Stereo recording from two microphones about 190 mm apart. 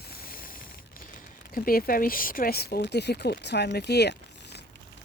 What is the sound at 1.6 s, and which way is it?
Speech, 50° left (ahead or behind).